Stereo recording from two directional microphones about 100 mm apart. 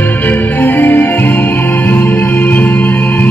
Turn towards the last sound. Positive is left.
turn(degrees=20)  # may be behind; listen again after turning